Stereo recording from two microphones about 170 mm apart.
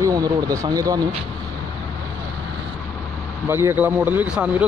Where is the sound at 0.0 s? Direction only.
20° right (ahead or behind).